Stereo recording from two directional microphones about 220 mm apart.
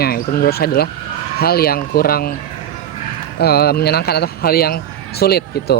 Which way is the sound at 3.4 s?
45° left (ahead or behind).